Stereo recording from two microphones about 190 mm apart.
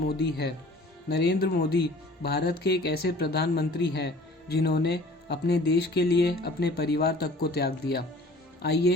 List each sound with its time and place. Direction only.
0.1 s speech: 60° left (ahead or behind)